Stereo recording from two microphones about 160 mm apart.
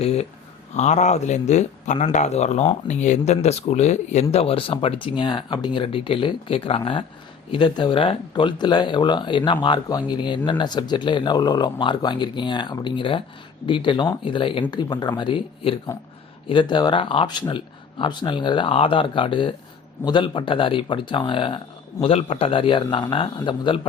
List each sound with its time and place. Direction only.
0.0 s speech: 40° left (ahead or behind)